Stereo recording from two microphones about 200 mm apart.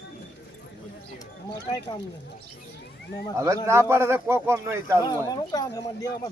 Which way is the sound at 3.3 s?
15° right (ahead or behind).